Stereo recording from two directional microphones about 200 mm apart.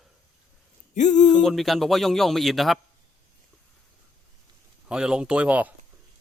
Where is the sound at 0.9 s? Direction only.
35° left (ahead or behind).